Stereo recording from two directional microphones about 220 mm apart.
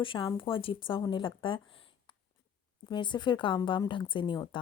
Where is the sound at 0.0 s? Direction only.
20° left (ahead or behind).